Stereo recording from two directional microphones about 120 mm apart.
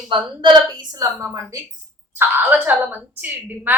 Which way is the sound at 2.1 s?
15° right (ahead or behind).